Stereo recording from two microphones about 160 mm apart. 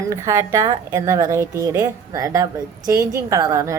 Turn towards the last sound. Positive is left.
turn(degrees=-20)  # may be behind; listen again after turning